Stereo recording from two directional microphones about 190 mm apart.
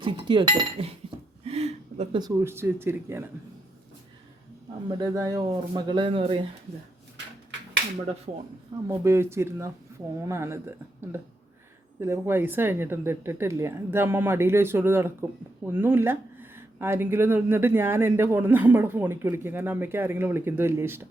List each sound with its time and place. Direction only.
0.0 s speech: 25° right (ahead or behind)
1.5 s a sound: 35° right (ahead or behind)
2.1 s speech: 15° right (ahead or behind)
4.9 s speech: 20° right (ahead or behind)
8.3 s speech: 35° right (ahead or behind)
8.9 s speech: 15° right (ahead or behind)